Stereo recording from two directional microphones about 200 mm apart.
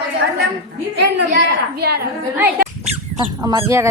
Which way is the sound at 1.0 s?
60° right (ahead or behind).